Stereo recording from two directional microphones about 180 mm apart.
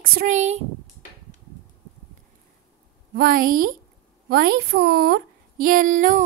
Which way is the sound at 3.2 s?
50° right (ahead or behind).